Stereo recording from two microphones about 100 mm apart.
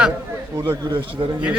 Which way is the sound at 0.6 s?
50° right (ahead or behind).